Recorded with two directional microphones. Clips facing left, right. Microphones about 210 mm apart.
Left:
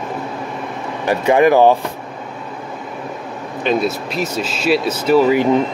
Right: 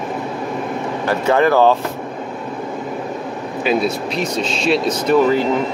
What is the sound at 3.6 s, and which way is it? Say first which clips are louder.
Speech: even; centre (ahead or behind).